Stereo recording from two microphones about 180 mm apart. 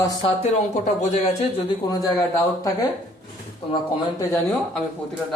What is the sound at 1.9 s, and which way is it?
Speech, 20° left (ahead or behind).